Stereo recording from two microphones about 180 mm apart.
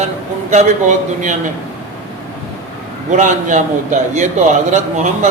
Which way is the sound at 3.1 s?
45° right (ahead or behind).